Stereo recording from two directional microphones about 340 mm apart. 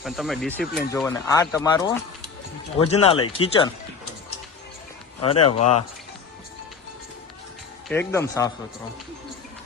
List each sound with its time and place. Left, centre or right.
0.0 s speech: centre
5.2 s speech: centre
7.9 s speech: centre